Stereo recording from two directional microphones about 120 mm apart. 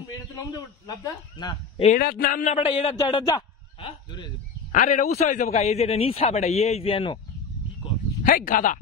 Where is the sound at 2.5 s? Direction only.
60° left (ahead or behind); by 4.2 s 45° left (ahead or behind).